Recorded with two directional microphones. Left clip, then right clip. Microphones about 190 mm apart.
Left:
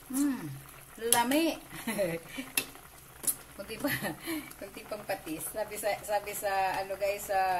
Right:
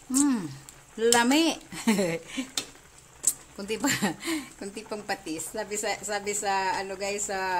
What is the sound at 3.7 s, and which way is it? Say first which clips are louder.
Speech: right 6 dB; 55° right (ahead or behind).